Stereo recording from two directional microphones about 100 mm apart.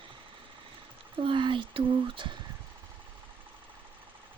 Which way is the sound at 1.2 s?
60° right (ahead or behind).